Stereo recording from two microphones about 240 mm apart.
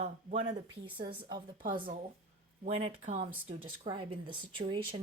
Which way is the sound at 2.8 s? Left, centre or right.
Right.